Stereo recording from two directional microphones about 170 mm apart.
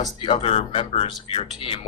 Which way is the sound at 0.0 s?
30° left (ahead or behind).